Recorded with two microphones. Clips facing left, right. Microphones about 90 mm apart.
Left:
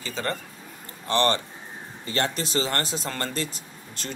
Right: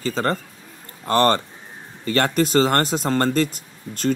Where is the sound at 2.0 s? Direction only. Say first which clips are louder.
Right 8 dB; 55° right (ahead or behind).